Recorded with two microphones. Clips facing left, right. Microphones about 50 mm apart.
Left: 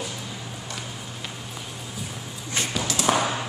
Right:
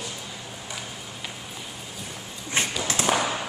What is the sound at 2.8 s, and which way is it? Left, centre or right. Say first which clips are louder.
Tap: even; right.